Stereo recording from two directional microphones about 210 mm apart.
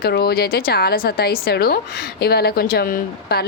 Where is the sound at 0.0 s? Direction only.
50° left (ahead or behind).